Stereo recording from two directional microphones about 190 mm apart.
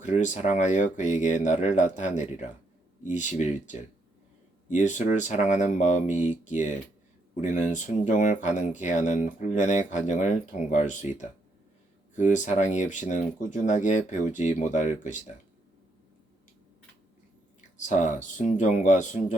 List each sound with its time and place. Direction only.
0.0 s speech: 40° left (ahead or behind)
12.1 s speech: 40° left (ahead or behind)
17.7 s speech: 40° left (ahead or behind)